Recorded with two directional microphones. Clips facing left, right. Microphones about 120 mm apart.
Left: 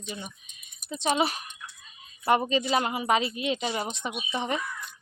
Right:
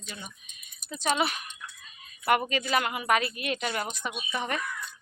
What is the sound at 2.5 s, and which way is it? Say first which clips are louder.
Speech: left 2 dB; 25° left (ahead or behind).